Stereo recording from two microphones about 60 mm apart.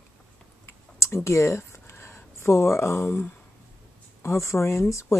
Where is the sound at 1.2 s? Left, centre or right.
Left.